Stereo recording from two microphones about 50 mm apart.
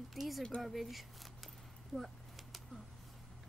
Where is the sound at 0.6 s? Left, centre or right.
Centre.